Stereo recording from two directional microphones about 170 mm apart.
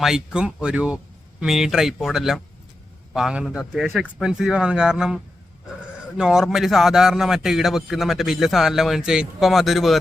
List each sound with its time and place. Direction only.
0.0 s a man's voice: 5° right (ahead or behind)